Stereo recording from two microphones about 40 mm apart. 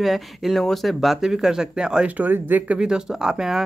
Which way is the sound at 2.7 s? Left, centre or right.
Centre.